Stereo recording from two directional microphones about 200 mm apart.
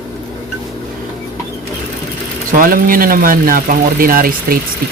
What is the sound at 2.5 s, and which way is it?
Speech, 45° right (ahead or behind).